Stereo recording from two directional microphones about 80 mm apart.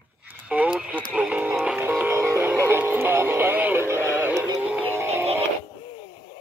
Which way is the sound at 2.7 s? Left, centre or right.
Right.